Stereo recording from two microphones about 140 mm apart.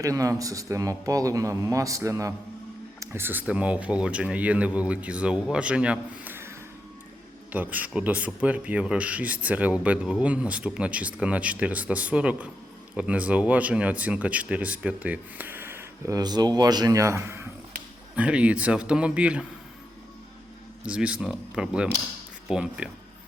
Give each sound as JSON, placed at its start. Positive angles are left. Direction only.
{"t": 0.0, "sound": "a man's voice", "side_deg": -25}
{"t": 7.5, "sound": "speech", "side_deg": -10}
{"t": 20.8, "sound": "speech", "side_deg": -5}